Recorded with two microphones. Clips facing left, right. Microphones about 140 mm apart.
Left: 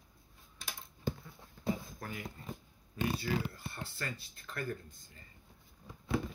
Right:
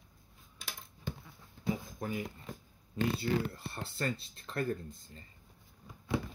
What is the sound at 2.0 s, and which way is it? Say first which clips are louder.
Speech: right 6 dB; 20° right (ahead or behind).